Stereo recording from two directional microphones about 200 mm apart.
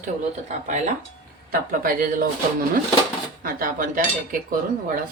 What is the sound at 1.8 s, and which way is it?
Cutlery, 45° right (ahead or behind).